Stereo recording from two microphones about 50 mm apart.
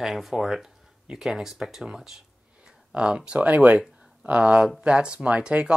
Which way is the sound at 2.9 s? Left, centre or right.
Right.